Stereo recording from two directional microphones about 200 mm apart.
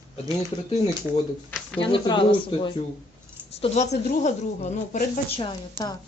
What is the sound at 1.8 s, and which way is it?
Speech, 25° left (ahead or behind).